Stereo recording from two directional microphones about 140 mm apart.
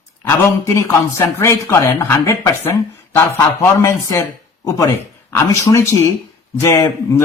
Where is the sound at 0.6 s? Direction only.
20° left (ahead or behind).